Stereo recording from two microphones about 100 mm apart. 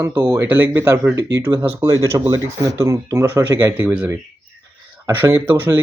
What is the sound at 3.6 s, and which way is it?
Speech, 15° right (ahead or behind).